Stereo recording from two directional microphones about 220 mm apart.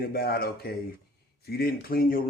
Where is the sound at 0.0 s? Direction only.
45° left (ahead or behind).